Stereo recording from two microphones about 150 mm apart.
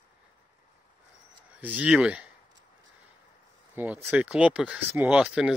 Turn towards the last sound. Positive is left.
turn(degrees=-5)  # may be behind; listen again after turning